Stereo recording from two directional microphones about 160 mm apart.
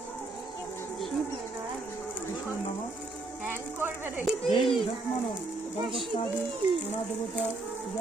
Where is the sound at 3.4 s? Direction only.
15° right (ahead or behind).